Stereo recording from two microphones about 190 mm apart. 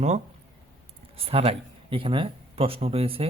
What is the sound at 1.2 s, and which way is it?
Speech, 30° right (ahead or behind).